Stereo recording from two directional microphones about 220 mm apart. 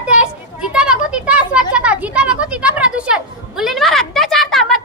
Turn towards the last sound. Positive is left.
turn(degrees=0)  # may be behind; listen again after turning